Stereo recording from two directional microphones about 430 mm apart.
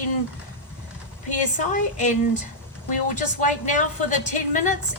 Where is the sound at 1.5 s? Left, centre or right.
Centre.